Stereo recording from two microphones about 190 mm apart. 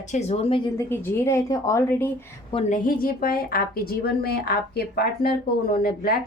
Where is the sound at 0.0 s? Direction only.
40° left (ahead or behind).